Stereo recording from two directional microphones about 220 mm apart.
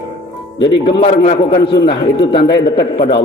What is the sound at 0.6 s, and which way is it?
A man's voice, 20° left (ahead or behind).